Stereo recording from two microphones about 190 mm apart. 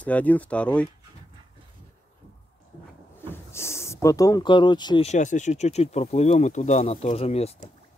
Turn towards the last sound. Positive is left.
turn(degrees=35)  # may be behind; listen again after turning